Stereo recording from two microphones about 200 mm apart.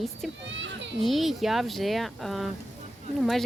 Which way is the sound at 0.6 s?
60° right (ahead or behind).